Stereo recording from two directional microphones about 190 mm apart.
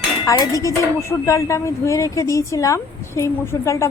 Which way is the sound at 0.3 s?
15° left (ahead or behind).